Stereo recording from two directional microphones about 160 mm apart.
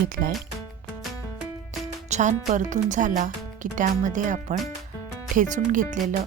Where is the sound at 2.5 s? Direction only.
50° right (ahead or behind).